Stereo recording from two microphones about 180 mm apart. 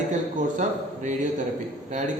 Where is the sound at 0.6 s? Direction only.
45° right (ahead or behind).